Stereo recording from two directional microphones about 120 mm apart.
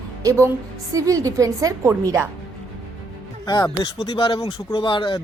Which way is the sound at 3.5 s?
35° left (ahead or behind).